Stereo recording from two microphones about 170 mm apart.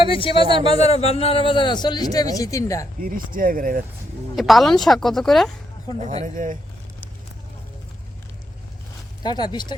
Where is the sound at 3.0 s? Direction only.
55° right (ahead or behind).